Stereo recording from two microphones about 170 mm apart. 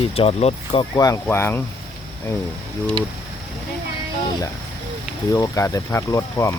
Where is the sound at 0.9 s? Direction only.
20° left (ahead or behind).